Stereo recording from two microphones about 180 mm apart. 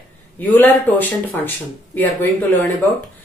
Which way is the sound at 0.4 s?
10° left (ahead or behind).